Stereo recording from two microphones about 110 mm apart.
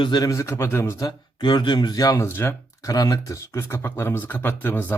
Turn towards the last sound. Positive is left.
turn(degrees=15)  # may be behind; listen again after turning